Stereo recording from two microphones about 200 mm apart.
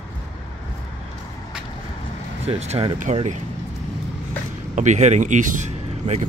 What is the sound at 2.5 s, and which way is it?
Speech, 30° right (ahead or behind).